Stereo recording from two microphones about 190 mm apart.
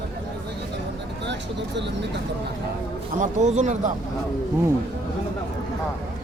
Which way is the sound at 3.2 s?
40° right (ahead or behind).